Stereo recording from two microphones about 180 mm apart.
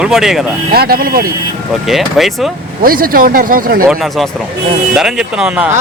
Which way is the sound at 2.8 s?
50° right (ahead or behind).